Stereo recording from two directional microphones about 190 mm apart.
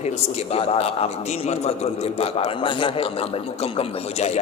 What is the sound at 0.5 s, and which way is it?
A man's voice, 30° left (ahead or behind).